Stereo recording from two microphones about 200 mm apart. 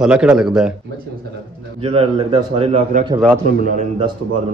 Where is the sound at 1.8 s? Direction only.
30° right (ahead or behind).